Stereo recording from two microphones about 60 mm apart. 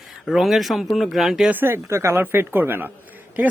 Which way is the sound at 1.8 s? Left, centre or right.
Right.